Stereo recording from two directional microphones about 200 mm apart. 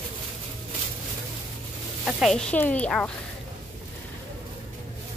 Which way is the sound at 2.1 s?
Centre (ahead or behind).